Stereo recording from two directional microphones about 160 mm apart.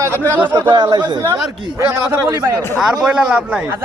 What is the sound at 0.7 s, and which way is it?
A man's voice, 25° right (ahead or behind).